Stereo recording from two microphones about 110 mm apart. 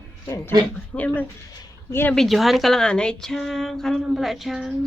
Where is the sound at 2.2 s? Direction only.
Centre (ahead or behind).